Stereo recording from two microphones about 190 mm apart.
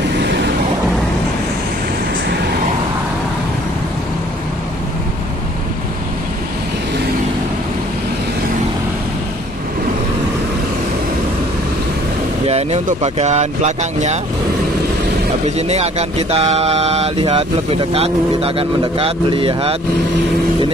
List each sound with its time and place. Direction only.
12.4 s speech: 35° right (ahead or behind)
15.5 s speech: 35° right (ahead or behind)